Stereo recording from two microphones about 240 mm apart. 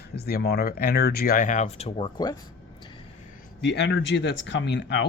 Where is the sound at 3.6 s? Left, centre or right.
Left.